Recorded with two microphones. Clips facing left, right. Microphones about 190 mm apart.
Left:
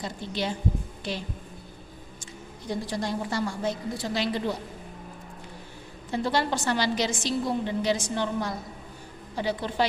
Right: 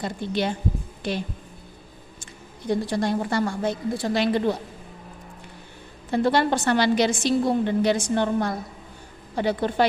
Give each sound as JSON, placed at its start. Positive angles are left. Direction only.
{"t": 0.0, "sound": "a woman's voice", "side_deg": -55}
{"t": 2.6, "sound": "a woman's voice", "side_deg": -60}
{"t": 6.1, "sound": "a woman's voice", "side_deg": -60}